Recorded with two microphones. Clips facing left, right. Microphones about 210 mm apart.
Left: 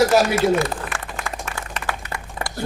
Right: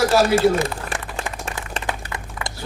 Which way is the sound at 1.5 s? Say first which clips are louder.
Right 1 dB; 20° right (ahead or behind).